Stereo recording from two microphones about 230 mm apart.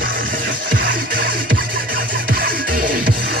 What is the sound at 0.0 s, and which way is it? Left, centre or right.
Music, right.